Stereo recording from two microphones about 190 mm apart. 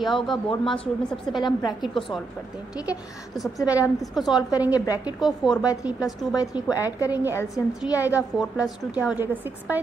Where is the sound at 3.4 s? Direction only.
5° right (ahead or behind).